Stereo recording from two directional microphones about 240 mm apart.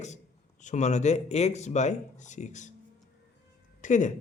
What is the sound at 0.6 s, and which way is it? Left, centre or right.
Speech, left.